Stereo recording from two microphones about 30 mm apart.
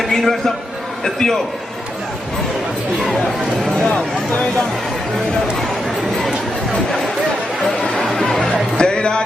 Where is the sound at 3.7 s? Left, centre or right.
Centre.